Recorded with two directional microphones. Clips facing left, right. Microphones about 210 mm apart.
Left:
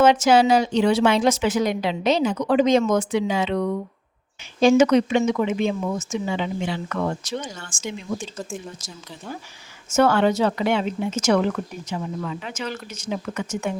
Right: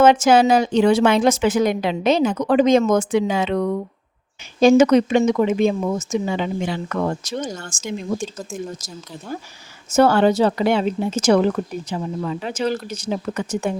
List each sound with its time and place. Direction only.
0.0 s speech: 50° right (ahead or behind)
9.9 s speech: 35° right (ahead or behind)